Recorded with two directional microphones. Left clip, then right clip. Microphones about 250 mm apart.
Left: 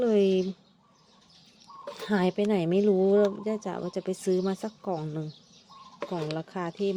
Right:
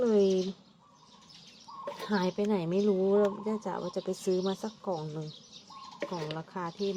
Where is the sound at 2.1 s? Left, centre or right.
Left.